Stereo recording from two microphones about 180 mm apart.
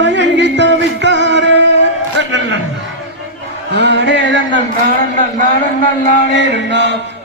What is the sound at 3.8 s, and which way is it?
Music, 80° right.